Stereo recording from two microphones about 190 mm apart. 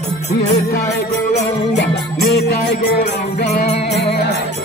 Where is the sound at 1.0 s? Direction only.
40° left (ahead or behind).